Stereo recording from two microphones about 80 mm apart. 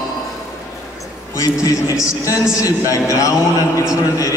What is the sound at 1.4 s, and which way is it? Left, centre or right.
A man's voice, left.